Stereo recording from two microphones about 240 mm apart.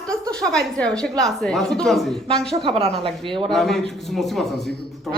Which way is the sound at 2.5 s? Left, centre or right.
Right.